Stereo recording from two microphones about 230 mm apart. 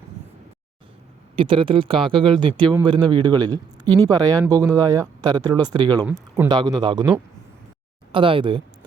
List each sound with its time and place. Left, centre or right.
1.4 s speech: right
8.1 s speech: right